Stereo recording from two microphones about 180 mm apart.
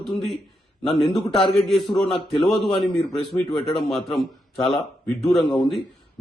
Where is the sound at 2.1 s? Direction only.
30° left (ahead or behind).